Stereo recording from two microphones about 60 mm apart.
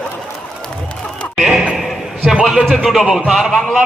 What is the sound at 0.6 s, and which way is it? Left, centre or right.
Crowd, centre.